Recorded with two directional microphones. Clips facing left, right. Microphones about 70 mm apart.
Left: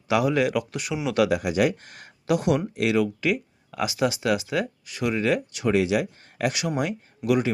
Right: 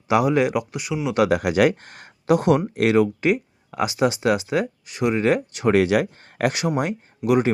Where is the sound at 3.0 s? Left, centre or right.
Right.